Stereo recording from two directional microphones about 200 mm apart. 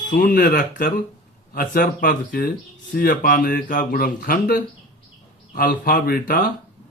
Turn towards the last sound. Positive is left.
turn(degrees=50)  # may be behind; listen again after turning